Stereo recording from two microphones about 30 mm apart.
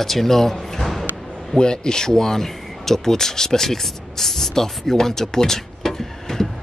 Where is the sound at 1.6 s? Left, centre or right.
Left.